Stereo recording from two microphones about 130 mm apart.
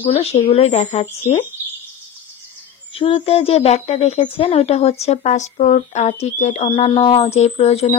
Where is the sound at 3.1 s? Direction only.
50° left (ahead or behind).